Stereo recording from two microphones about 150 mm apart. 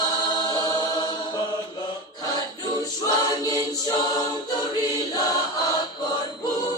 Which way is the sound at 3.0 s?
25° left (ahead or behind).